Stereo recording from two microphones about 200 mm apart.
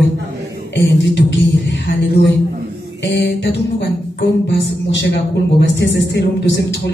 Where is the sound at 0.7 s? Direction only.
65° left (ahead or behind).